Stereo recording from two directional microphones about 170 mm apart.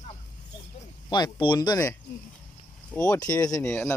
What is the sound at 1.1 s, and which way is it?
Speech, 25° left (ahead or behind).